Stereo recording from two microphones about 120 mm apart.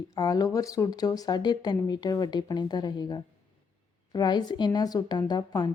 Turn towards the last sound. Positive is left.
turn(degrees=35)  # may be behind; listen again after turning